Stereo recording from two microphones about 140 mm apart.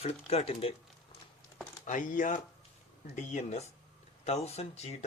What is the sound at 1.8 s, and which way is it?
Speech, 70° left (ahead or behind).